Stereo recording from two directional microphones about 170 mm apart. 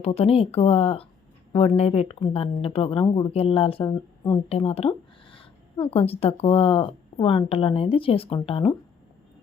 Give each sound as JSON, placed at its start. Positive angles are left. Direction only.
{"t": 0.0, "sound": "speech", "side_deg": 35}